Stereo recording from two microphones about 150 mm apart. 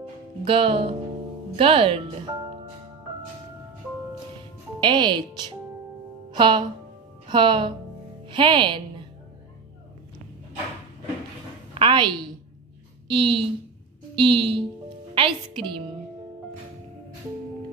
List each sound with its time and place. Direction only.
0.5 s speech: 35° right (ahead or behind)
4.7 s a woman's voice: 30° right (ahead or behind)
11.7 s a sound: 35° right (ahead or behind)
13.1 s speech: 35° right (ahead or behind)